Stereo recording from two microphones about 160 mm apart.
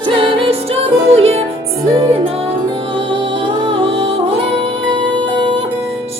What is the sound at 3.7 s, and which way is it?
Music, 35° right (ahead or behind).